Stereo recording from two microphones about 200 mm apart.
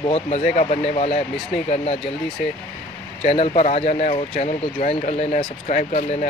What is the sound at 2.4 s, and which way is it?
Speech, 45° left (ahead or behind).